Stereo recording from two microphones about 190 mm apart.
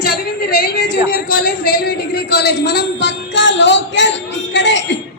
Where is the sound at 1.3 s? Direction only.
50° left (ahead or behind); by 4.8 s 70° left (ahead or behind).